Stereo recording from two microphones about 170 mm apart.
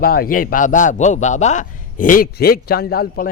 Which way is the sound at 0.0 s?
60° left (ahead or behind).